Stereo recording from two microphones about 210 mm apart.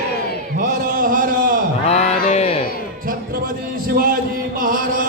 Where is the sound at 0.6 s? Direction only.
40° right (ahead or behind).